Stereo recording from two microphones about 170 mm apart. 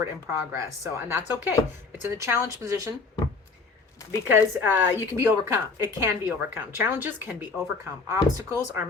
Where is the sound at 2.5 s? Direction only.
20° right (ahead or behind).